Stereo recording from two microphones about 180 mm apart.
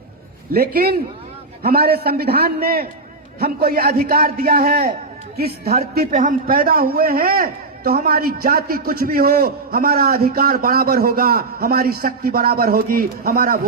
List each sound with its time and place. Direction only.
0.5 s a man's voice: 60° right (ahead or behind)